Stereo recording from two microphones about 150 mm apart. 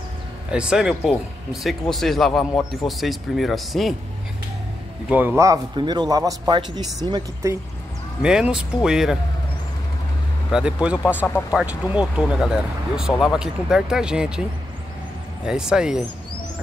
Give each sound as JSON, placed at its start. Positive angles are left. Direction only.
{"t": 0.5, "sound": "speech", "side_deg": -5}
{"t": 5.1, "sound": "a man's voice", "side_deg": -15}
{"t": 5.8, "sound": "speech", "side_deg": -30}
{"t": 8.2, "sound": "speech", "side_deg": -5}
{"t": 10.5, "sound": "a man's voice", "side_deg": -5}
{"t": 15.4, "sound": "speech", "side_deg": -5}